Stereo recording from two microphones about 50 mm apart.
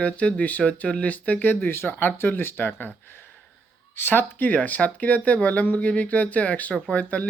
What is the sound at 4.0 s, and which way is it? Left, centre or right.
Speech, left.